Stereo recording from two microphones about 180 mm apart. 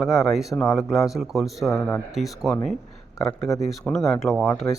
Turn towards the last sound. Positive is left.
turn(degrees=0)  # may be behind; listen again after turning